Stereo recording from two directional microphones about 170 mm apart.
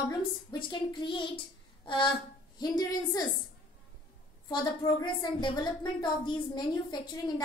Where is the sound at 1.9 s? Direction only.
30° left (ahead or behind).